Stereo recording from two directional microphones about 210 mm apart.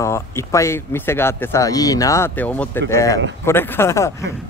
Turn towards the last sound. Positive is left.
turn(degrees=15)  # may be behind; listen again after turning